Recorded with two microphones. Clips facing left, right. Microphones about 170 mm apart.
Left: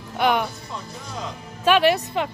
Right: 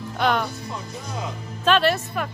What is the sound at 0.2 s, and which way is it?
Speech, 10° left (ahead or behind).